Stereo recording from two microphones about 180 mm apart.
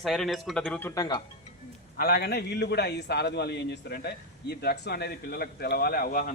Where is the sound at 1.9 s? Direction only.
55° left (ahead or behind).